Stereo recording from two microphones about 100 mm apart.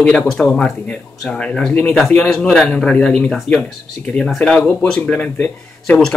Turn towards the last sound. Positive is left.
turn(degrees=15)  # may be behind; listen again after turning